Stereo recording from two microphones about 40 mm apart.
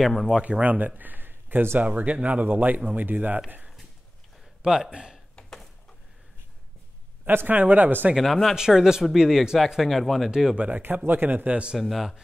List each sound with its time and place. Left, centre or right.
0.0 s speech: centre
0.4 s speech: right
2.0 s speech: right
3.4 s a sound: right
4.6 s speech: centre
5.3 s a sound: centre
7.2 s speech: right
8.2 s speech: centre
8.5 s speech: centre
9.8 s speech: centre
10.5 s speech: right
11.1 s speech: right
11.8 s speech: centre